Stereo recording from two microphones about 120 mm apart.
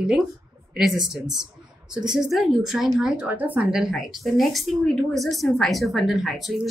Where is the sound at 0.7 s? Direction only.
5° right (ahead or behind).